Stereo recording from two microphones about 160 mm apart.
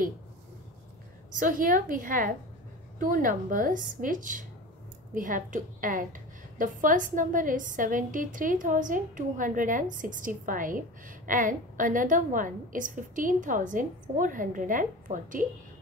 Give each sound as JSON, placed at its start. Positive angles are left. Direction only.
{"t": 1.4, "sound": "a woman's voice", "side_deg": -60}